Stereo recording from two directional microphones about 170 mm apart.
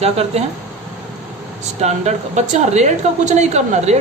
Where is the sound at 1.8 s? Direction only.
40° right (ahead or behind).